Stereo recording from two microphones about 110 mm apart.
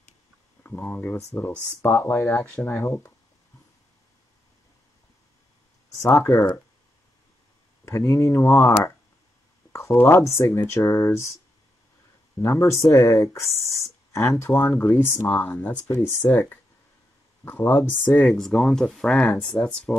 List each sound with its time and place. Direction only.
0.8 s speech: 15° left (ahead or behind)
6.0 s speech: 25° left (ahead or behind)
7.8 s speech: 25° left (ahead or behind)
9.7 s a sound: 25° left (ahead or behind)
9.9 s speech: 25° left (ahead or behind)
12.4 s speech: 25° left (ahead or behind)
17.5 s speech: 20° left (ahead or behind)
18.2 s speech: 5° left (ahead or behind)